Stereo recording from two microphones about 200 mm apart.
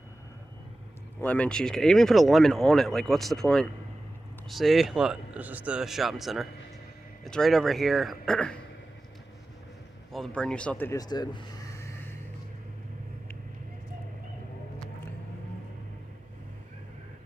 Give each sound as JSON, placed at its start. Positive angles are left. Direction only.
{"t": 1.2, "sound": "speech", "side_deg": 5}
{"t": 10.1, "sound": "speech", "side_deg": 5}